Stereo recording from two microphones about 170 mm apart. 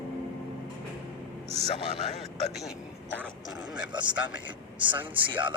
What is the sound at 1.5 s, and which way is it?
Speech, 35° right (ahead or behind).